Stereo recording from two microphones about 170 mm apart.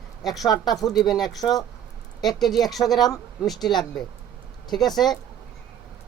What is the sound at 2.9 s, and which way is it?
Speech, 25° left (ahead or behind).